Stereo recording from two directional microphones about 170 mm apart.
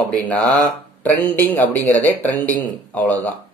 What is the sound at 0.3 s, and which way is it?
Speech, 10° left (ahead or behind).